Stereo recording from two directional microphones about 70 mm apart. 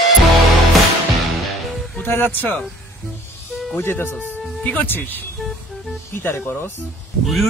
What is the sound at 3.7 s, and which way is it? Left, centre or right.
Speech, left.